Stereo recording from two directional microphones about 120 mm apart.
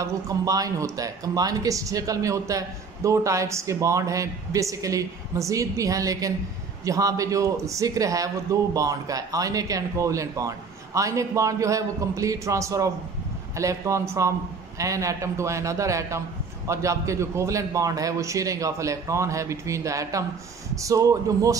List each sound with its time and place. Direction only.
0.0 s speech: 30° right (ahead or behind)